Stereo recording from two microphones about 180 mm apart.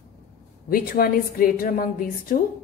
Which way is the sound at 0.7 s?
55° left (ahead or behind).